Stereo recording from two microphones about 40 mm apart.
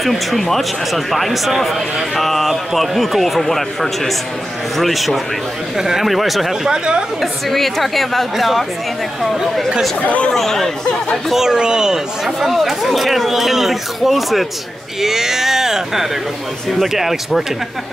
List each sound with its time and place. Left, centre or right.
0.0 s speech: centre
6.7 s a woman's voice: right
7.2 s speech: centre
10.0 s speech: left
10.3 s speech: centre
11.3 s speech: centre
12.4 s speech: centre